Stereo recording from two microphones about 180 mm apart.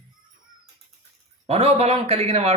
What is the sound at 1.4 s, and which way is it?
A man's voice, 35° right (ahead or behind).